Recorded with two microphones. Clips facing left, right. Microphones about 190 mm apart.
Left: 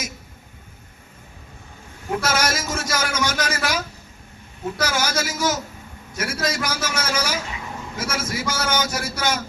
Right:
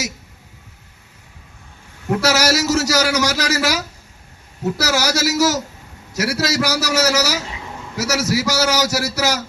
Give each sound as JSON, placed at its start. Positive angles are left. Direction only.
{"t": 2.2, "sound": "a man's voice", "side_deg": -80}